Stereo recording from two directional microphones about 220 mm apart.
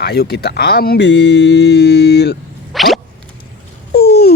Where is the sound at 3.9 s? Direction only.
45° left (ahead or behind).